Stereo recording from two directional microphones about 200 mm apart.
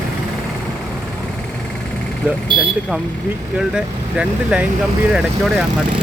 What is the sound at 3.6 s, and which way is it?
Speech, 5° right (ahead or behind).